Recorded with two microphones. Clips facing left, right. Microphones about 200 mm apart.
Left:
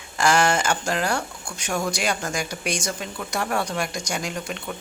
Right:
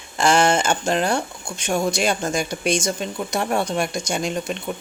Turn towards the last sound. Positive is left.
turn(degrees=-25)  # may be behind; listen again after turning